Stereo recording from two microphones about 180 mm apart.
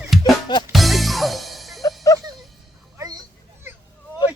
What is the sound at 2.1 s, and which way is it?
Music, 20° left (ahead or behind).